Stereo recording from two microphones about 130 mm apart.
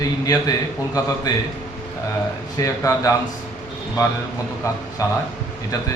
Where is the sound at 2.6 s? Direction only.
25° left (ahead or behind).